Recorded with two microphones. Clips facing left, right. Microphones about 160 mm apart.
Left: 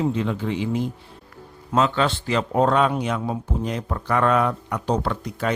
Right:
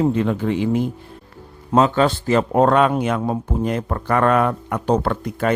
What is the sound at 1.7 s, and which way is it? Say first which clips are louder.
Speech: right 5 dB; 35° right (ahead or behind).